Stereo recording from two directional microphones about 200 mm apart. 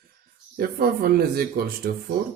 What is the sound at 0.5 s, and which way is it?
Speech, 50° right (ahead or behind).